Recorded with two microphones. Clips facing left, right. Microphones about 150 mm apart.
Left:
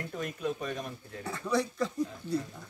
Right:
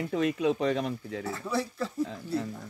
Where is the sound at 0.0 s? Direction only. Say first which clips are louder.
Right 8 dB; 85° right.